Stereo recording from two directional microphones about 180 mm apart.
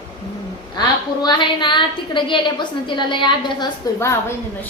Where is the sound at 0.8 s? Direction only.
25° left (ahead or behind).